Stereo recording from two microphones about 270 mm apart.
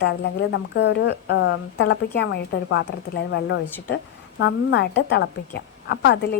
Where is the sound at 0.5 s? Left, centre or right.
Left.